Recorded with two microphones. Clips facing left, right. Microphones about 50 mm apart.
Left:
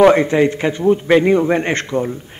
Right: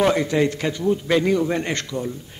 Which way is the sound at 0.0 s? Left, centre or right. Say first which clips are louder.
Left 8 dB; left.